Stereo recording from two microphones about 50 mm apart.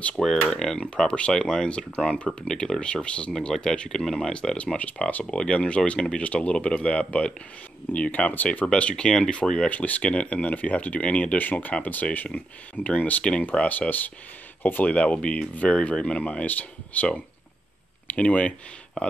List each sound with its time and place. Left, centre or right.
0.2 s speech: centre
4.3 s speech: centre
8.6 s speech: left
9.7 s speech: left
11.8 s speech: left
14.9 s speech: left